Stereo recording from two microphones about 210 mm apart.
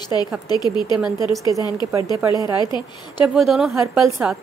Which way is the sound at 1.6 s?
20° left (ahead or behind).